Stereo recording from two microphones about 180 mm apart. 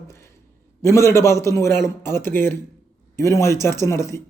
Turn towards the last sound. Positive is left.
turn(degrees=15)  # may be behind; listen again after turning